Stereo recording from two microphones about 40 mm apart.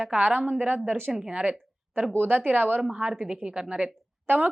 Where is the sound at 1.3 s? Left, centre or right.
Right.